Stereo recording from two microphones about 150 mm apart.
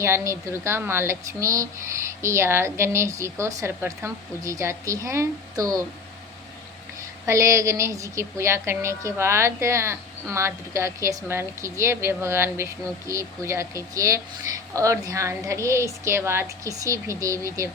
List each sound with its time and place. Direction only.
0.0 s a woman's voice: 15° right (ahead or behind)
7.3 s a woman's voice: 20° right (ahead or behind)